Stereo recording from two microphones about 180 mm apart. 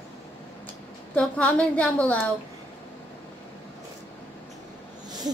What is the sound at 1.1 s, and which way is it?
A woman's voice, 5° left (ahead or behind).